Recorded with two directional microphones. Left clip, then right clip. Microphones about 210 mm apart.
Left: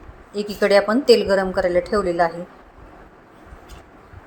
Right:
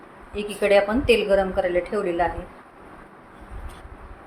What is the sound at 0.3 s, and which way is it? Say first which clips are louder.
A woman's voice: left 2 dB; 30° left (ahead or behind).